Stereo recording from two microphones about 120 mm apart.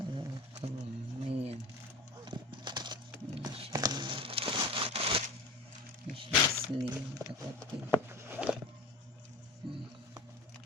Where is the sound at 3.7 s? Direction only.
35° right (ahead or behind); by 5.2 s 55° right (ahead or behind).